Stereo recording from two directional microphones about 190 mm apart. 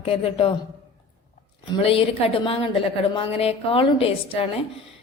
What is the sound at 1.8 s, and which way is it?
A woman's voice, 30° left (ahead or behind).